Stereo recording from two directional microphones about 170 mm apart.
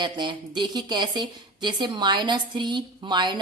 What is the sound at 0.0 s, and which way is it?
A woman's voice, 25° right (ahead or behind).